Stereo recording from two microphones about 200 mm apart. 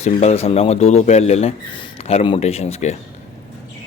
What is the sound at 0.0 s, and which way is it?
Speech, 35° left (ahead or behind).